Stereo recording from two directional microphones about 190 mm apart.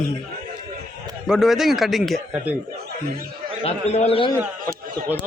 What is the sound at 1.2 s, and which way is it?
Speech, centre (ahead or behind).